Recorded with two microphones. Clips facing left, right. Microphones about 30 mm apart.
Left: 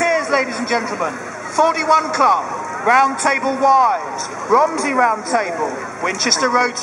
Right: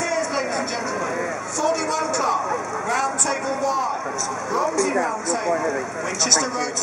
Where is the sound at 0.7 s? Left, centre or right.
Left.